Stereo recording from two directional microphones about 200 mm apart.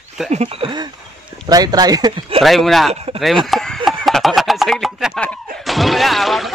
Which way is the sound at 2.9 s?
30° right (ahead or behind).